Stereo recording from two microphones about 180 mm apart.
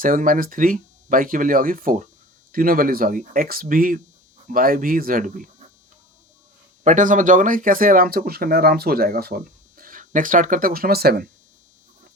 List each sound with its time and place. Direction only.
0.0 s speech: 50° right (ahead or behind)
6.8 s speech: 45° right (ahead or behind)